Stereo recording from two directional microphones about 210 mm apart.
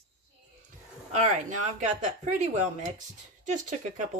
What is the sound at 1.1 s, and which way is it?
Speech, 35° right (ahead or behind).